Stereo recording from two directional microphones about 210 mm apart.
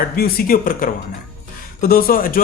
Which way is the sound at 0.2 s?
45° left (ahead or behind).